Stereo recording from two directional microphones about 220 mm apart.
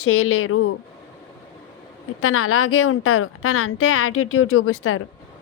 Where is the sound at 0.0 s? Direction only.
70° left (ahead or behind).